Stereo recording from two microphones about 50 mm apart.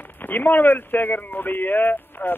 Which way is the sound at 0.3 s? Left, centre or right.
Left.